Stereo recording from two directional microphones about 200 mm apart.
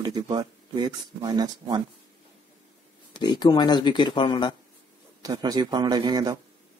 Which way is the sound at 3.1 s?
20° left (ahead or behind).